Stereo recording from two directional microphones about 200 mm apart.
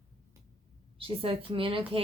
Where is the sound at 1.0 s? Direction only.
25° right (ahead or behind).